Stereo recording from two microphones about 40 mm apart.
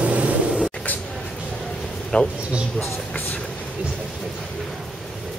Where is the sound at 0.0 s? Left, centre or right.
Right.